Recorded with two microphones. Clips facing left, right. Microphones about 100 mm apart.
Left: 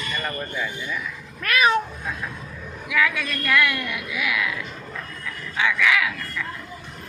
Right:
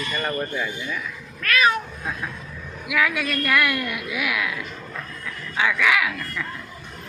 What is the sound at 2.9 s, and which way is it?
A woman's voice, 10° right (ahead or behind).